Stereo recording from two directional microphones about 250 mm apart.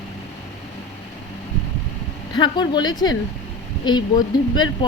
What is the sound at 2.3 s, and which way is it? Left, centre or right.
Speech, centre.